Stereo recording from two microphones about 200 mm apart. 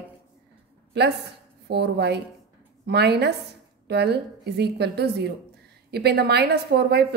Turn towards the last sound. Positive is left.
turn(degrees=-55)  # may be behind; listen again after turning